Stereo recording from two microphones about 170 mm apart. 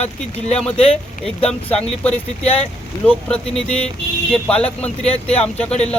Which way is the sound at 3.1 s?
5° left (ahead or behind).